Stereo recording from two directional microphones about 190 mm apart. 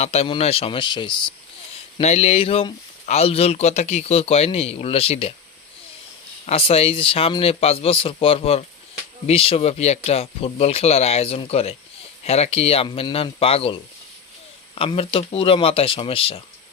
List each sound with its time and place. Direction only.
0.0 s speech: 35° left (ahead or behind)
6.4 s speech: 30° left (ahead or behind)